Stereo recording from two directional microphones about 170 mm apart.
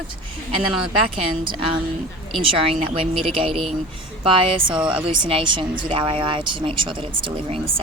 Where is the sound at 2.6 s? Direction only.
35° right (ahead or behind).